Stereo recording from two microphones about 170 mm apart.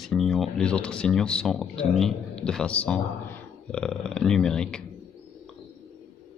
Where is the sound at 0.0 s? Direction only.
Centre (ahead or behind).